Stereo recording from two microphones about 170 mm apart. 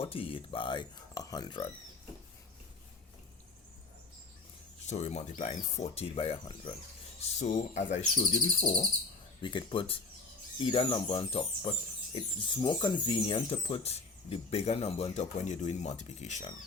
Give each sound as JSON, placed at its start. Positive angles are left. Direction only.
{"t": 0.0, "sound": "speech", "side_deg": 35}
{"t": 4.9, "sound": "speech", "side_deg": 40}
{"t": 7.3, "sound": "speech", "side_deg": 45}